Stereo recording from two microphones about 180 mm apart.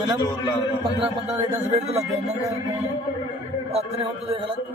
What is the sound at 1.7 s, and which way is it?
Speech, 35° right (ahead or behind).